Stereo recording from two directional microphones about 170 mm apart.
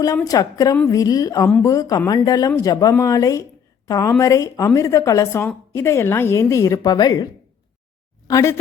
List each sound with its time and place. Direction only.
0.3 s a woman's voice: 20° left (ahead or behind)
8.3 s a woman's voice: 15° left (ahead or behind)